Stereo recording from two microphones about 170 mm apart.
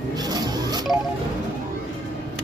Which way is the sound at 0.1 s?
25° right (ahead or behind).